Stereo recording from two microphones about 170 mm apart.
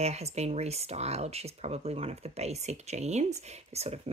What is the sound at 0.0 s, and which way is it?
Speech, 40° right (ahead or behind).